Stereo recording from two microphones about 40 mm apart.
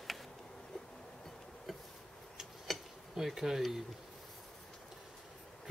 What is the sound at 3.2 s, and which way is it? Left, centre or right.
Speech, centre.